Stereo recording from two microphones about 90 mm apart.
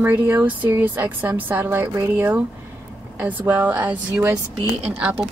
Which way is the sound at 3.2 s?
20° right (ahead or behind).